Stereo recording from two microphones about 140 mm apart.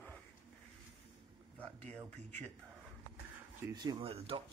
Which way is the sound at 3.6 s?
25° right (ahead or behind).